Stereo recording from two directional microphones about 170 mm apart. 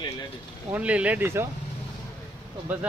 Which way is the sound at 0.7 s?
5° right (ahead or behind).